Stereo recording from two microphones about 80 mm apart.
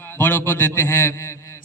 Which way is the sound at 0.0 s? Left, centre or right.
Left.